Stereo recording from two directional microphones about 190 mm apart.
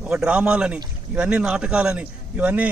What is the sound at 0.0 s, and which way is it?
A man's voice, 5° right (ahead or behind).